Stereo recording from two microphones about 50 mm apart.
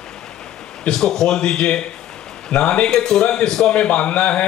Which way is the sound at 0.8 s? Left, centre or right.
Centre.